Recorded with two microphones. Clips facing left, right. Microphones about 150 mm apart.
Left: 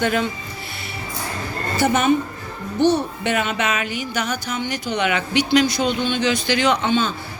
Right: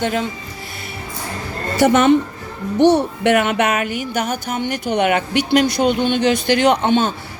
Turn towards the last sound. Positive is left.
turn(degrees=-55)  # may be behind; listen again after turning